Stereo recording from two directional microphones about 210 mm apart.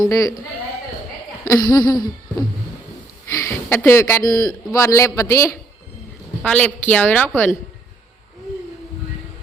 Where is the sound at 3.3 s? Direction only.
10° left (ahead or behind).